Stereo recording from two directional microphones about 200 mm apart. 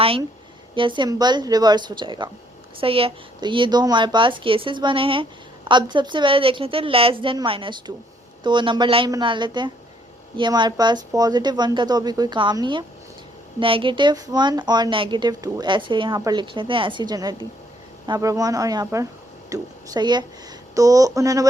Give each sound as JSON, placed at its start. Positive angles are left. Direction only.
{"t": 0.8, "sound": "a woman's voice", "side_deg": -25}